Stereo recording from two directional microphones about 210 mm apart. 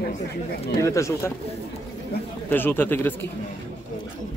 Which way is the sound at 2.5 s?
10° left (ahead or behind).